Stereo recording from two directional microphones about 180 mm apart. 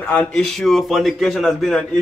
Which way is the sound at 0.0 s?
10° left (ahead or behind).